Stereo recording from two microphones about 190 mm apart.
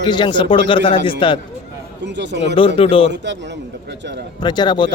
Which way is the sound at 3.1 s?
70° right (ahead or behind).